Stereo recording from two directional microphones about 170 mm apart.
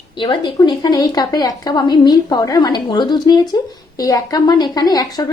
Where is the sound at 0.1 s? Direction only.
25° left (ahead or behind).